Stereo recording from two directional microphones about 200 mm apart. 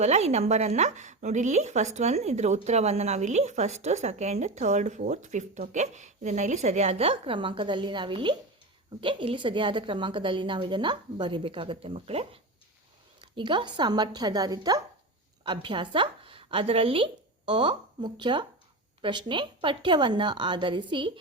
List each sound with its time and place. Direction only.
0.0 s a woman's voice: 35° right (ahead or behind)